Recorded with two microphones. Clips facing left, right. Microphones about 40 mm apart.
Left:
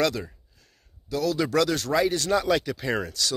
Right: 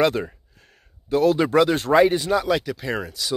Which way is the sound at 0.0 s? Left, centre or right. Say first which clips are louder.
Right 5 dB; right.